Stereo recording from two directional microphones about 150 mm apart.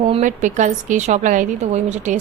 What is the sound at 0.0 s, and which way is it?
A woman's voice, 55° right (ahead or behind).